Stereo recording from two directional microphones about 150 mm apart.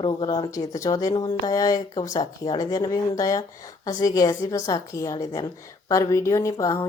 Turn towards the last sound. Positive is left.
turn(degrees=20)  # may be behind; listen again after turning